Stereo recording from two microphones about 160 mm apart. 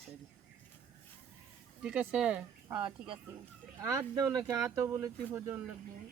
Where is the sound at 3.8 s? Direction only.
15° right (ahead or behind).